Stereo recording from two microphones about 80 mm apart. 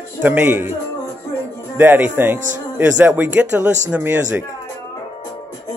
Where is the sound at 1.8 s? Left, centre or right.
Right.